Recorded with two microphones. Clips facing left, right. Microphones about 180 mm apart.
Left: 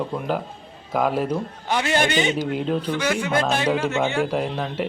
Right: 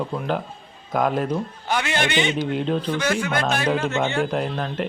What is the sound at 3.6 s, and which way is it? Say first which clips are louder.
Speech: left 1 dB; 10° left (ahead or behind).